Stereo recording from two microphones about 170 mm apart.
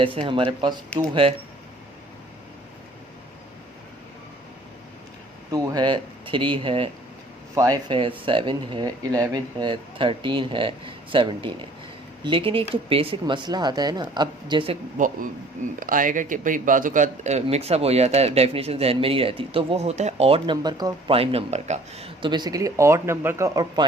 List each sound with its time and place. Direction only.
0.0 s speech: 30° right (ahead or behind)
5.5 s speech: 20° right (ahead or behind)
7.5 s speech: 20° right (ahead or behind)
14.9 s a man's voice: 50° right (ahead or behind); by 23.8 s 20° right (ahead or behind)